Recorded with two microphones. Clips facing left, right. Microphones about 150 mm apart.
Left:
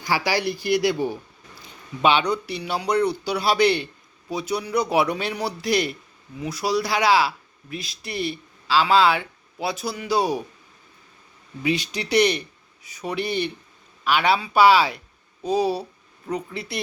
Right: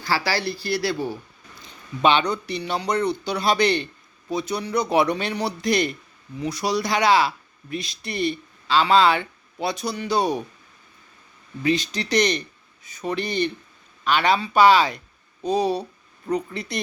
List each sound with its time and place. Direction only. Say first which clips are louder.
0.0 s speech: left 1 dB; 15° left (ahead or behind)
11.6 s speech: right 2 dB; 10° left (ahead or behind)